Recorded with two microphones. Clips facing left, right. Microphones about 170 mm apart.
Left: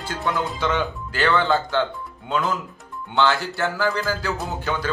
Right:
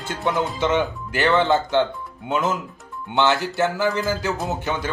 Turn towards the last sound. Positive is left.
turn(degrees=-20)  # may be behind; listen again after turning